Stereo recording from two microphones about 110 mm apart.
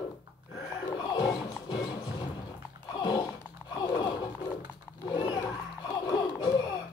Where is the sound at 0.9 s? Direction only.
40° left (ahead or behind).